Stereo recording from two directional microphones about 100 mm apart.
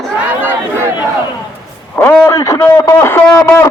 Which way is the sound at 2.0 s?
30° left (ahead or behind).